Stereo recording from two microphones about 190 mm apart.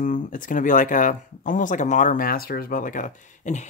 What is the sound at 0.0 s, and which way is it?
Speech, 40° left (ahead or behind).